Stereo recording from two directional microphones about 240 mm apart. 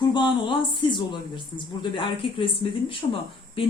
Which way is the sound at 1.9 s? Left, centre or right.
Left.